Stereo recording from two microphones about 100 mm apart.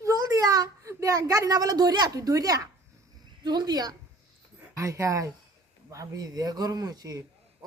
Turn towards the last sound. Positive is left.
turn(degrees=-35)  # may be behind; listen again after turning